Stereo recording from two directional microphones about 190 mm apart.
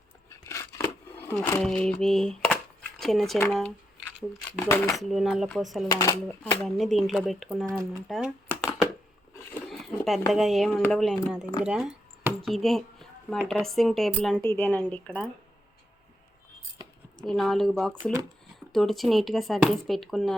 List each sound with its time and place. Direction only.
0.3 s music: 15° left (ahead or behind)
1.6 s a woman's voice: 5° left (ahead or behind)
5.1 s speech: centre (ahead or behind)
5.9 s a woman's voice: 15° left (ahead or behind)
6.6 s speech: centre (ahead or behind)
8.0 s a sound: centre (ahead or behind)
9.6 s speech: centre (ahead or behind)
11.6 s a sound: 5° right (ahead or behind)
13.7 s a woman's voice: centre (ahead or behind)
16.8 s a sound: 20° right (ahead or behind)
17.2 s speech: centre (ahead or behind)